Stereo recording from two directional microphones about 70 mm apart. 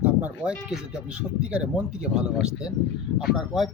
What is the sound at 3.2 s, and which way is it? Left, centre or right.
Speech, centre.